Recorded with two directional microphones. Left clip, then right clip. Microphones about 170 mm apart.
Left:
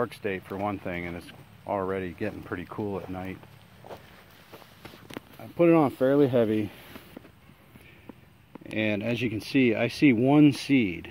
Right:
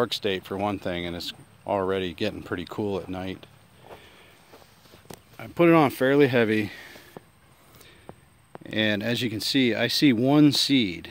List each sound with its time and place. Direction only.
0.0 s speech: 65° right (ahead or behind)
5.4 s speech: 40° right (ahead or behind)
8.6 s speech: 35° right (ahead or behind)